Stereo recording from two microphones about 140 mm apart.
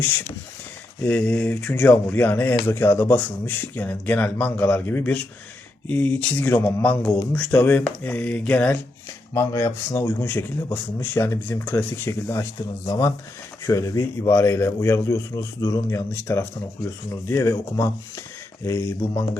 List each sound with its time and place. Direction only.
1.0 s a man's voice: 10° left (ahead or behind)